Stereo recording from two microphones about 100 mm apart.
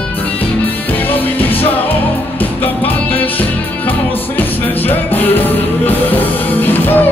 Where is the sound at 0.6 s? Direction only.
20° left (ahead or behind).